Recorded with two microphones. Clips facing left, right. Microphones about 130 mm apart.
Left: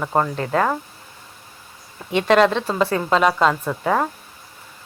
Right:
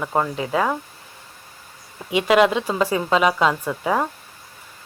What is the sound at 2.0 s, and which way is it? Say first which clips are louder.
A woman's voice: left 1 dB; 10° right (ahead or behind).